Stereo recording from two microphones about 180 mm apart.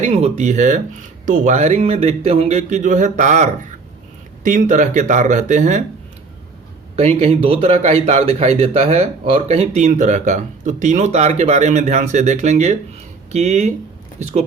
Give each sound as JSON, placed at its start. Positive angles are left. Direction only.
{"t": 0.0, "sound": "speech", "side_deg": -40}
{"t": 6.9, "sound": "speech", "side_deg": -35}